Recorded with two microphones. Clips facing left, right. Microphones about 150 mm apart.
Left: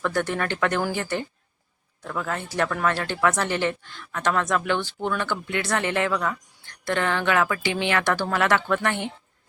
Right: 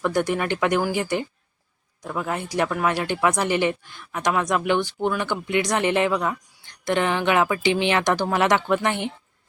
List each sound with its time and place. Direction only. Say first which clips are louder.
0.0 s speech: right 3 dB; 15° right (ahead or behind)